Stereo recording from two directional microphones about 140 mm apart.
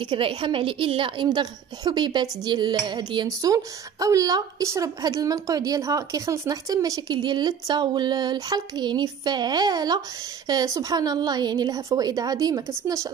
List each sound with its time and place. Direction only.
0.0 s a woman's voice: 40° right (ahead or behind); by 13.1 s 25° right (ahead or behind)